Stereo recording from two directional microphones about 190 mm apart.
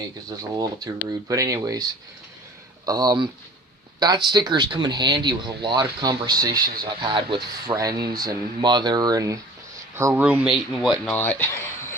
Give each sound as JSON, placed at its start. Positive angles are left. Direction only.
{"t": 0.3, "sound": "speech", "side_deg": -20}